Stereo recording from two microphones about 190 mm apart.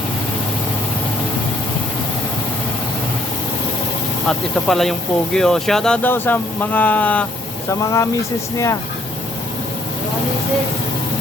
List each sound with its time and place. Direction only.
4.3 s speech: centre (ahead or behind)